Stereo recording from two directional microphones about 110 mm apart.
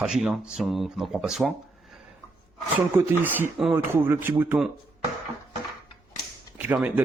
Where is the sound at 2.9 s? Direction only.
20° right (ahead or behind).